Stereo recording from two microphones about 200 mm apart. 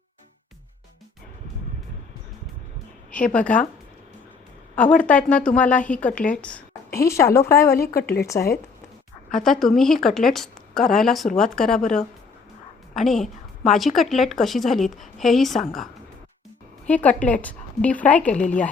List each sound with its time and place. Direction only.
3.3 s a woman's voice: 5° left (ahead or behind)
4.7 s a woman's voice: 5° left (ahead or behind)
7.8 s a woman's voice: 50° left (ahead or behind)
9.3 s a woman's voice: centre (ahead or behind)
12.9 s a woman's voice: centre (ahead or behind)